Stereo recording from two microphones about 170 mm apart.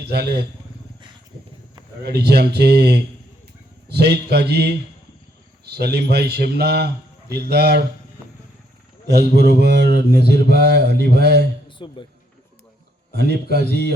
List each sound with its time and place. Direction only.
0.0 s speech: 70° right (ahead or behind)
2.0 s speech: 70° right (ahead or behind)
9.0 s speech: 75° right (ahead or behind)
11.8 s speech: 30° left (ahead or behind)
13.1 s speech: 75° right (ahead or behind)